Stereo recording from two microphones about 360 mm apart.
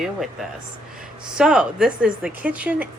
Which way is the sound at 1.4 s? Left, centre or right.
Centre.